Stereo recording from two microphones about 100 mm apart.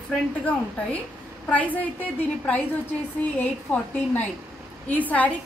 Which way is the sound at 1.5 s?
15° left (ahead or behind).